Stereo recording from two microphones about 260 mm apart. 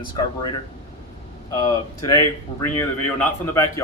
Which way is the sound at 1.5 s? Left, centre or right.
Centre.